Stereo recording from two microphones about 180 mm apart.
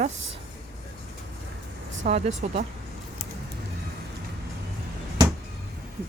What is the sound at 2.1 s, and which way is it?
Speech, 35° right (ahead or behind).